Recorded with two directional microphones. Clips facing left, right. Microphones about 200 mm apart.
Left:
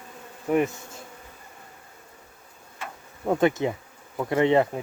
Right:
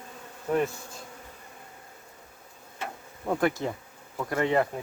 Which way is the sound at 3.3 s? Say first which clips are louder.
Left 4 dB; 20° left (ahead or behind).